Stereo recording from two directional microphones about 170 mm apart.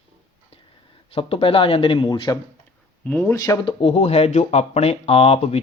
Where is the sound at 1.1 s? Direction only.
35° left (ahead or behind).